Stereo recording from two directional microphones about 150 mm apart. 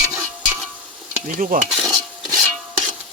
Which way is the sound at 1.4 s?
70° right (ahead or behind).